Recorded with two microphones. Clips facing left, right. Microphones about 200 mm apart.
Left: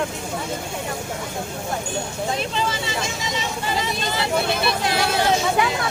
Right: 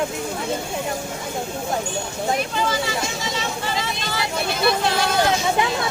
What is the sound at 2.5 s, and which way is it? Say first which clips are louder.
Vehicle: right 2 dB; 25° left (ahead or behind).